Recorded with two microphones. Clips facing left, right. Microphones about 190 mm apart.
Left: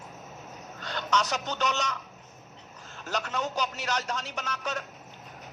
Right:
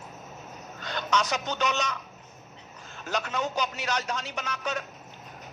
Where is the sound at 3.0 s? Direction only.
15° right (ahead or behind).